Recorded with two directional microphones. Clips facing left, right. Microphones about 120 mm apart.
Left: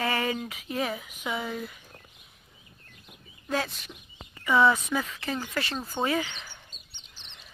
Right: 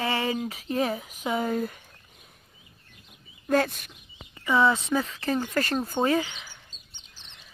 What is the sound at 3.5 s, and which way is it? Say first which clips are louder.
Speech: right 6 dB; 50° right (ahead or behind).